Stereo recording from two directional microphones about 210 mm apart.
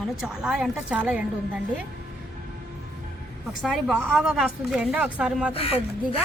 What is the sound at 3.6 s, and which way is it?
Speech, centre (ahead or behind).